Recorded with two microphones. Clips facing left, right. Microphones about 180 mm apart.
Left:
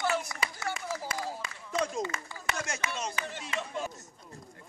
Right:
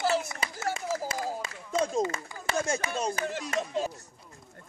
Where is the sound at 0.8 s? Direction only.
45° right (ahead or behind).